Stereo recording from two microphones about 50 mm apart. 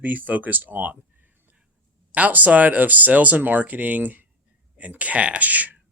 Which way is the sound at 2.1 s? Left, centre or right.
Right.